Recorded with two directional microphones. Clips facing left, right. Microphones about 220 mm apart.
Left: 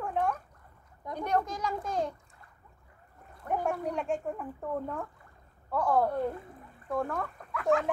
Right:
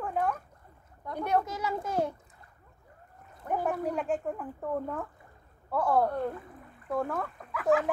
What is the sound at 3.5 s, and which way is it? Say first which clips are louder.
A child's voice: right 1 dB; centre (ahead or behind).